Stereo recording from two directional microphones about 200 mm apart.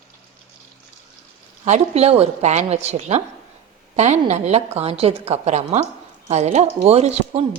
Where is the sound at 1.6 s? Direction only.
35° right (ahead or behind).